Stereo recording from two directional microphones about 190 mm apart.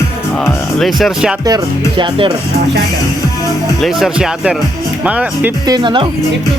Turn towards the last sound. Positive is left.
turn(degrees=-25)  # may be behind; listen again after turning